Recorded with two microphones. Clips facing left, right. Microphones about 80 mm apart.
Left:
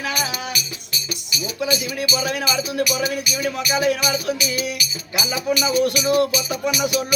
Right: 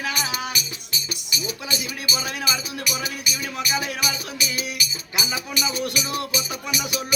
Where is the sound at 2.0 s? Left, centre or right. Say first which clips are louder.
Left 4 dB; right.